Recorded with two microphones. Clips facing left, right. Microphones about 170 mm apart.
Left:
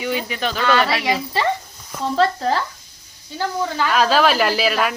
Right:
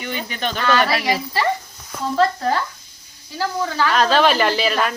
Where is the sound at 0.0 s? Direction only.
5° left (ahead or behind).